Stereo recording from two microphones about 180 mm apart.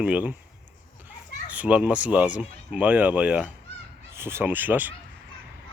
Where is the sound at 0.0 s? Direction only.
10° right (ahead or behind).